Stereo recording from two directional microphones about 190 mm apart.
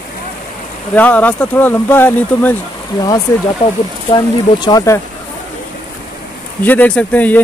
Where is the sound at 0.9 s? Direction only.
10° left (ahead or behind).